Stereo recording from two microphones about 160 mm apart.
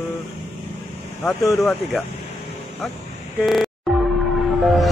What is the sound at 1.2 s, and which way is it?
Speech, 20° left (ahead or behind).